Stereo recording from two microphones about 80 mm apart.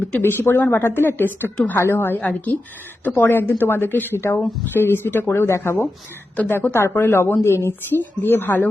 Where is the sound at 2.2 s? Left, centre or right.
Centre.